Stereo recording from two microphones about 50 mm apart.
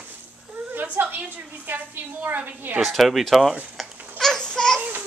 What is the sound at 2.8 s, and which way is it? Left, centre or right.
Speech, centre.